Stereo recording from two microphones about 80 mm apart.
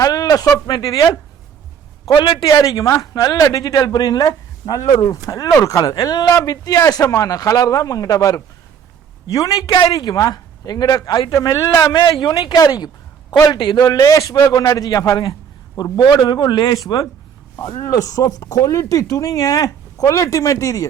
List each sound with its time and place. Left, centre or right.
0.0 s speech: left
2.0 s a man's voice: left
2.4 s speech: left
9.6 s a man's voice: left
9.9 s speech: left
12.2 s speech: left
13.8 s speech: left